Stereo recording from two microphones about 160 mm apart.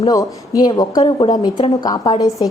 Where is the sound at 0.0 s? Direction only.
20° left (ahead or behind).